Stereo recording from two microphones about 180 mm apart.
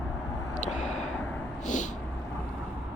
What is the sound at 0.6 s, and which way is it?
Vehicle, 40° left (ahead or behind).